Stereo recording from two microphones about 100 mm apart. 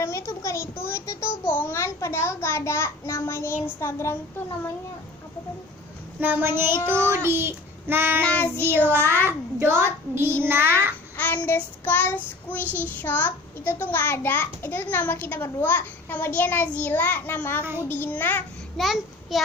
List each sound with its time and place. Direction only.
0.0 s a sound: 25° left (ahead or behind)
6.1 s a woman's voice: 15° right (ahead or behind)
6.6 s child singing: 25° right (ahead or behind)
8.2 s child singing: 15° left (ahead or behind)
8.9 s child singing: 25° right (ahead or behind)
11.2 s child singing: 15° left (ahead or behind)
12.7 s a child's voice: 15° left (ahead or behind)
17.6 s child singing: 20° right (ahead or behind)
17.8 s a child's voice: 20° left (ahead or behind)
18.8 s child singing: centre (ahead or behind)